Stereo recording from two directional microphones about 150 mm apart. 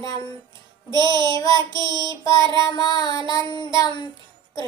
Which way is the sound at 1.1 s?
30° right (ahead or behind).